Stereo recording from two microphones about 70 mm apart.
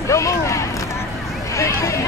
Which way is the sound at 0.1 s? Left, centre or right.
Left.